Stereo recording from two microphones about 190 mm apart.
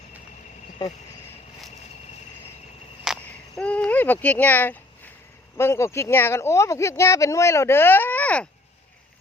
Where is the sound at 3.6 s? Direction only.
5° left (ahead or behind).